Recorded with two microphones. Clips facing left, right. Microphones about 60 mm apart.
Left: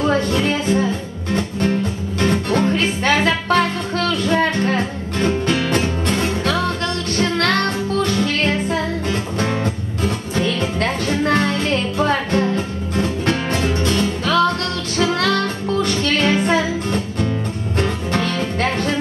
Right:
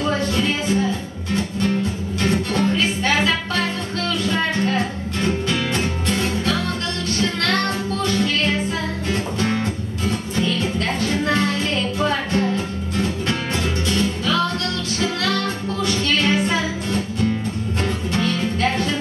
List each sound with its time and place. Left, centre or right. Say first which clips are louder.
0.3 s speech: left 3 dB; left
1.3 s music: left 2 dB; left
5.2 s music: left 4 dB; left
10.0 s music: left 2 dB; left